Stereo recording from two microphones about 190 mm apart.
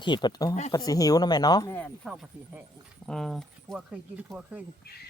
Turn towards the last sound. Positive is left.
turn(degrees=55)  # may be behind; listen again after turning